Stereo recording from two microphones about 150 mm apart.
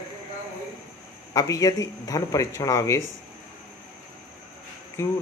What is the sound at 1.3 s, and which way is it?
Speech, 25° left (ahead or behind).